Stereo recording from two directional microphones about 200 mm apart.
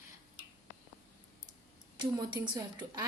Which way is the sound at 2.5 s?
20° right (ahead or behind).